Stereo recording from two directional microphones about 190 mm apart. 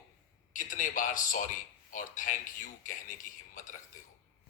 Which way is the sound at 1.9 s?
45° left (ahead or behind).